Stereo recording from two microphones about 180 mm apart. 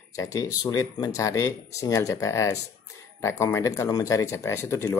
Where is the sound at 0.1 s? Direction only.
20° left (ahead or behind).